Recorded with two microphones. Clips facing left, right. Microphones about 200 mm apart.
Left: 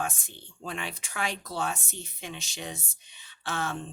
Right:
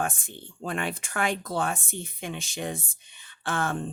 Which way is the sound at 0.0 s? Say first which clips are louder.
Right 3 dB; 55° right (ahead or behind).